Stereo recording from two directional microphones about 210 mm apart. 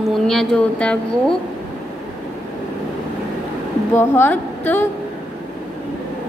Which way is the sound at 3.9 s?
10° left (ahead or behind).